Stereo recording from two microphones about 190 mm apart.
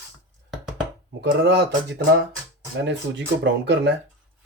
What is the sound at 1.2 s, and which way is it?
Speech, 60° right (ahead or behind).